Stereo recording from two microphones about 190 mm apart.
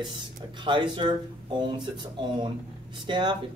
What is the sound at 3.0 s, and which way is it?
Speech, 25° right (ahead or behind).